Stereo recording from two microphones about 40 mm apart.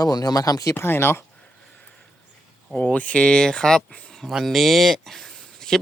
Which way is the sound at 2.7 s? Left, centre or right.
Left.